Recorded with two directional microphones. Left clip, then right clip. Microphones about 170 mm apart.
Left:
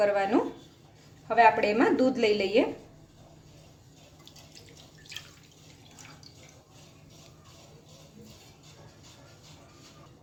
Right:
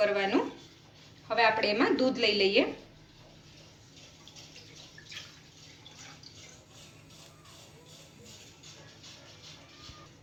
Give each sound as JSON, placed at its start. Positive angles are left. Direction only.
{"t": 0.1, "sound": "a woman's voice", "side_deg": 55}